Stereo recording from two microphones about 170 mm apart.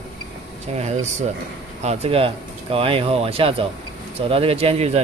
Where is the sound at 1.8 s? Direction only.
35° right (ahead or behind).